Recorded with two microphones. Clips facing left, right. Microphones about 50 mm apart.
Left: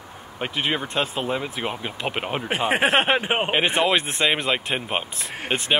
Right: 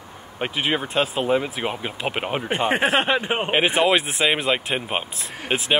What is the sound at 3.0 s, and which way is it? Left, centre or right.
Speech, left.